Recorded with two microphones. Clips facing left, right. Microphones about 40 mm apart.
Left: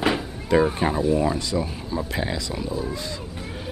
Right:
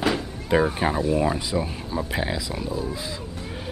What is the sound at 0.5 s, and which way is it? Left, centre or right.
Speech, centre.